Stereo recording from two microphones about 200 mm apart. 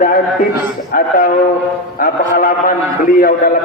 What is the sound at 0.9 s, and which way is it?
Speech, 45° left (ahead or behind).